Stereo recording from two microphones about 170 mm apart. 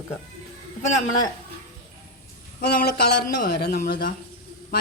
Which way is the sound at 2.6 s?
60° left (ahead or behind).